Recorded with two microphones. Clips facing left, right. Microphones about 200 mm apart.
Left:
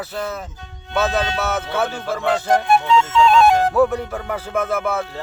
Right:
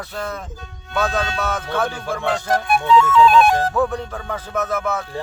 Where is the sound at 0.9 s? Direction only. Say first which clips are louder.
Left 2 dB; 20° left (ahead or behind).